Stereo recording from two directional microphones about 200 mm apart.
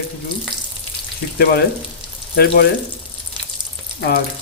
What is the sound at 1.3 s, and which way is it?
Speech, 50° left (ahead or behind).